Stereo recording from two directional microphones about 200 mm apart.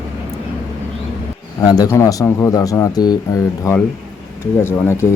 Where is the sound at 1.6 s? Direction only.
20° left (ahead or behind).